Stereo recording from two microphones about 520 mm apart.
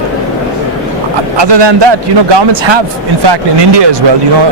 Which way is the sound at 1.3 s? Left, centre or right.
Right.